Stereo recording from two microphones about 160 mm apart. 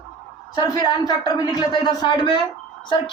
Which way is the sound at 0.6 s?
25° left (ahead or behind).